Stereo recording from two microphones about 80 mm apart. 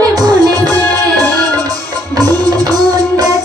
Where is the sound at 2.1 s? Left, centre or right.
Right.